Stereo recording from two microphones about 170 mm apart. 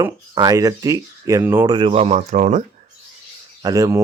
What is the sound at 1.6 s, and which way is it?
Speech, 25° right (ahead or behind).